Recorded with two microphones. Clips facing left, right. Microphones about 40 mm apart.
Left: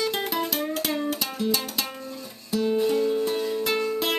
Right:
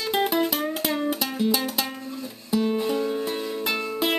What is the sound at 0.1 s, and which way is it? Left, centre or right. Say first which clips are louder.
Music: right 4 dB; centre.